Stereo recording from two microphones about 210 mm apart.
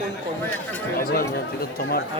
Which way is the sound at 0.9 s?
45° left (ahead or behind).